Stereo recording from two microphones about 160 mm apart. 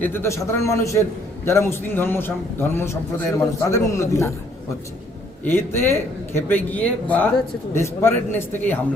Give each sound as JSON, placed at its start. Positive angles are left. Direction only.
{"t": 0.0, "sound": "a man's voice", "side_deg": 15}
{"t": 5.5, "sound": "a man's voice", "side_deg": 15}